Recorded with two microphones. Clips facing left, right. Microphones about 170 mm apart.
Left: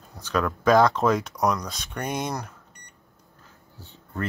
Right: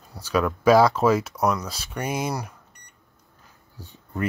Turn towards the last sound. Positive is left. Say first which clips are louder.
# right 3 dB
turn(degrees=-15)  # may be behind; listen again after turning